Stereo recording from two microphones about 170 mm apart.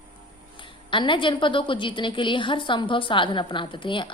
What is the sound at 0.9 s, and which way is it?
A woman's voice, 30° left (ahead or behind).